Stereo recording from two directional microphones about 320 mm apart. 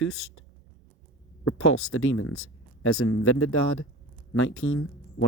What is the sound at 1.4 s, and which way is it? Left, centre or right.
Speech, left.